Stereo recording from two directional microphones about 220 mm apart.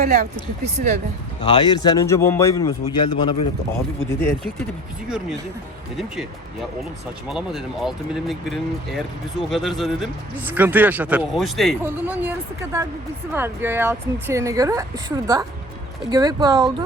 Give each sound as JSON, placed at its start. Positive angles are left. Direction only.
{"t": 0.0, "sound": "speech", "side_deg": -35}
{"t": 1.4, "sound": "a man's voice", "side_deg": 25}
{"t": 5.0, "sound": "a man's voice", "side_deg": -5}
{"t": 7.3, "sound": "a man's voice", "side_deg": 0}